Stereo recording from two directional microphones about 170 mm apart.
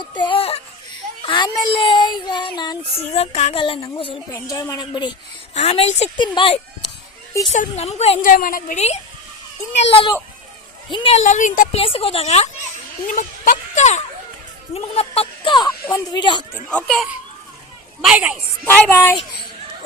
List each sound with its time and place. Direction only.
0.0 s a sound: 25° left (ahead or behind)
1.2 s speech: 30° left (ahead or behind)
4.3 s speech: 20° left (ahead or behind)
5.5 s a woman's voice: 35° left (ahead or behind)
6.1 s speech: 25° left (ahead or behind)
7.5 s a woman's voice: 40° left (ahead or behind)
8.2 s a woman's voice: 55° left (ahead or behind)
9.9 s a woman's voice: 30° left (ahead or behind); by 11.8 s 50° left (ahead or behind)
11.8 s a woman's voice: 35° left (ahead or behind)
16.5 s a child's voice: 5° left (ahead or behind)
18.0 s speech: 5° right (ahead or behind)
18.6 s a woman's voice: 15° left (ahead or behind)